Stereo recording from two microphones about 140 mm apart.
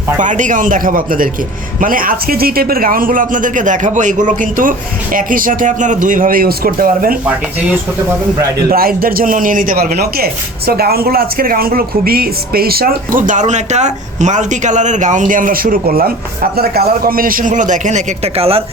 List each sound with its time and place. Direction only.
0.2 s a man's voice: 65° right (ahead or behind); by 7.2 s 90° right
8.7 s a man's voice: 90° right; by 18.6 s 45° right (ahead or behind)